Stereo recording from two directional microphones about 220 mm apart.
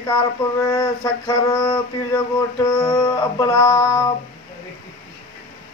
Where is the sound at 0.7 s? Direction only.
15° left (ahead or behind).